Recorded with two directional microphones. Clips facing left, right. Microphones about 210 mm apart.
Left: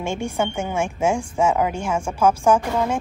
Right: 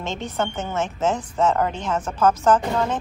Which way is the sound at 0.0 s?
10° left (ahead or behind).